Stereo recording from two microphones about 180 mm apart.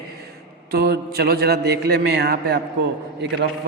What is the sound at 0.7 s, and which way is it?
A man's voice, 60° right (ahead or behind).